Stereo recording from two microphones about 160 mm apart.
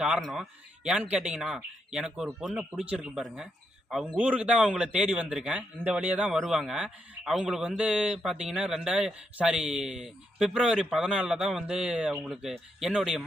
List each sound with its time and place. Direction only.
0.0 s a man's voice: centre (ahead or behind)